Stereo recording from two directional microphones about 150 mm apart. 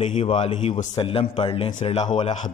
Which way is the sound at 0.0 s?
45° left (ahead or behind).